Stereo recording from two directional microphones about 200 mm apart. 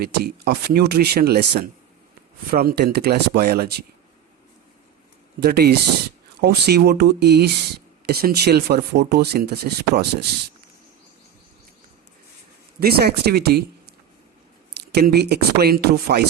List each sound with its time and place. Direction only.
0.0 s speech: 50° right (ahead or behind)
5.4 s speech: 50° right (ahead or behind)
12.8 s speech: 50° right (ahead or behind)